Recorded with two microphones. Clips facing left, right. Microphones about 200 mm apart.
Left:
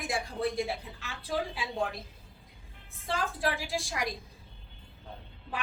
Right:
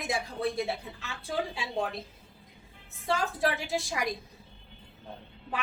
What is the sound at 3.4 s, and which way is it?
Speech, 25° right (ahead or behind).